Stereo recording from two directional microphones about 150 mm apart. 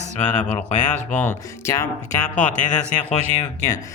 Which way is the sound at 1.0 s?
10° left (ahead or behind).